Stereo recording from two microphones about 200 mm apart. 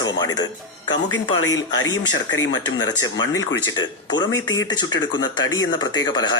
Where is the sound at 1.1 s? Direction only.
85° left; by 1.9 s 70° left (ahead or behind).